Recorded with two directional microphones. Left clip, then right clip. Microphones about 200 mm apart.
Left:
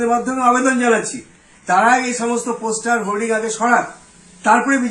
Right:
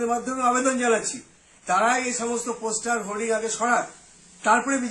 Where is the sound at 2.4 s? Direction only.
25° right (ahead or behind).